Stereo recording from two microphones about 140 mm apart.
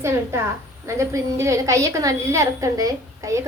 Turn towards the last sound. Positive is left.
turn(degrees=-25)  # may be behind; listen again after turning